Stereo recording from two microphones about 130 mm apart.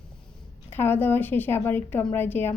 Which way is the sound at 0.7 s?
15° left (ahead or behind).